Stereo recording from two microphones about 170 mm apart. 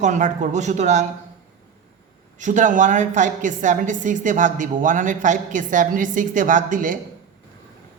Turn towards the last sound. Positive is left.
turn(degrees=-50)  # may be behind; listen again after turning